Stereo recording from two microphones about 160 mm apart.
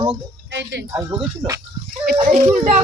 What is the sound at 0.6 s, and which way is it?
Speech, 90° right.